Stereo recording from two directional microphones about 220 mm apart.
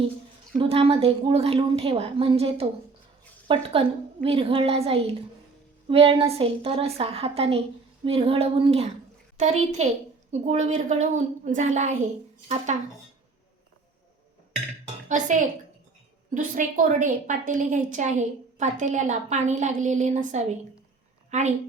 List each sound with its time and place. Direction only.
0.6 s a woman's voice: 25° right (ahead or behind)
15.1 s a woman's voice: 35° right (ahead or behind)
16.6 s a woman's voice: 35° right (ahead or behind)
21.2 s a sound: 30° right (ahead or behind)